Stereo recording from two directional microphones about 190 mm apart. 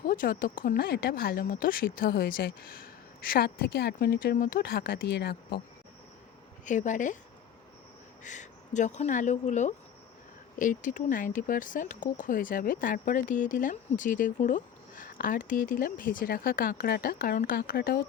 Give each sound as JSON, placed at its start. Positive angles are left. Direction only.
{"t": 0.0, "sound": "speech", "side_deg": 45}
{"t": 6.7, "sound": "speech", "side_deg": 40}
{"t": 8.2, "sound": "speech", "side_deg": 40}